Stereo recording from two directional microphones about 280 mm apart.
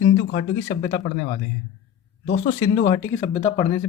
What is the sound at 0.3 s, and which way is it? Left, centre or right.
Speech, left.